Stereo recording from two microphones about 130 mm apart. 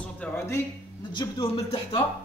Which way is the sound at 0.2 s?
20° left (ahead or behind).